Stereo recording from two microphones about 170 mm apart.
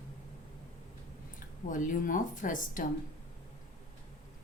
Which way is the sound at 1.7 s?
50° left (ahead or behind).